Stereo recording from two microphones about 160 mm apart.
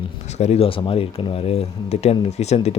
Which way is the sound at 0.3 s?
40° left (ahead or behind).